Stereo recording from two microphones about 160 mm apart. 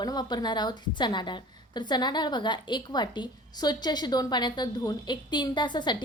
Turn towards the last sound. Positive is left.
turn(degrees=30)  # may be behind; listen again after turning